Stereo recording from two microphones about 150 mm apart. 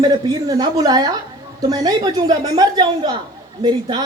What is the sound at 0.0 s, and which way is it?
A woman's voice, 25° right (ahead or behind).